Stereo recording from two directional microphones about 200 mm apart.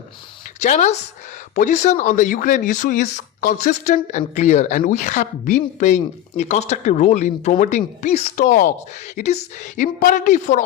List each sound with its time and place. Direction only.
0.6 s speech: 35° left (ahead or behind)